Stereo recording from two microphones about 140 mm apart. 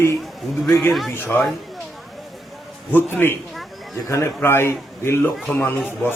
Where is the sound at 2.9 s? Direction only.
15° left (ahead or behind).